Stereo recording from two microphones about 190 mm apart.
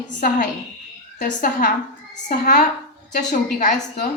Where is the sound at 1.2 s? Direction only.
50° left (ahead or behind).